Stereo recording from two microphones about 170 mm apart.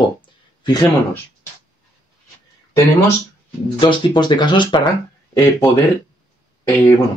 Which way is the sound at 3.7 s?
25° left (ahead or behind).